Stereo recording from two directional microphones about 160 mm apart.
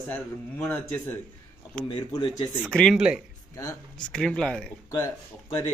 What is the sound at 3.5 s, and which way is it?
Speech, 20° left (ahead or behind).